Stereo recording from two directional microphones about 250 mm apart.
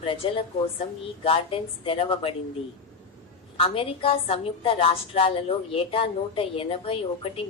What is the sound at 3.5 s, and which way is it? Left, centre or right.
A woman's voice, left.